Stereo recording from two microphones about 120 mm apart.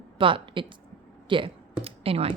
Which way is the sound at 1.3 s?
45° right (ahead or behind).